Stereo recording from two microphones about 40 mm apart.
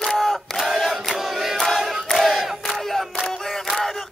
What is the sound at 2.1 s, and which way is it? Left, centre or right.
Battle cry, centre.